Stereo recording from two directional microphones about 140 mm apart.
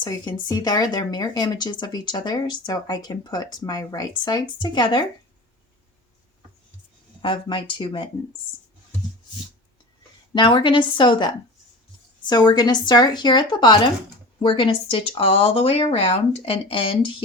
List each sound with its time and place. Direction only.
0.0 s speech: 30° left (ahead or behind)
7.2 s speech: 35° left (ahead or behind)
10.3 s speech: 35° left (ahead or behind)